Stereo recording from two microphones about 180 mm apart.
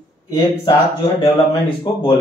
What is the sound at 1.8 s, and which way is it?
Speech, 25° left (ahead or behind).